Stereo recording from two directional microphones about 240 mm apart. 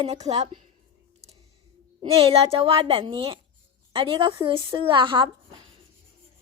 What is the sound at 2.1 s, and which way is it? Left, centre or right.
A woman's voice, right.